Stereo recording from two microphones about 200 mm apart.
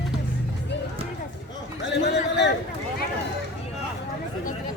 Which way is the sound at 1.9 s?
60° left (ahead or behind).